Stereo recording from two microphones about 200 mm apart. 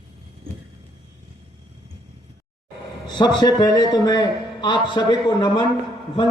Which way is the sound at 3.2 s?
20° left (ahead or behind).